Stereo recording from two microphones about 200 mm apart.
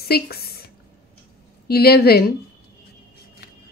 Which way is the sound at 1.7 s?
50° left (ahead or behind).